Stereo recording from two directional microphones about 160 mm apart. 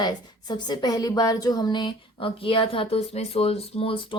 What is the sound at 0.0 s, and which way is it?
A woman's voice, 25° left (ahead or behind).